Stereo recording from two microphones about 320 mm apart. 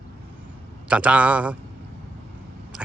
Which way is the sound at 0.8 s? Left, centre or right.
Centre.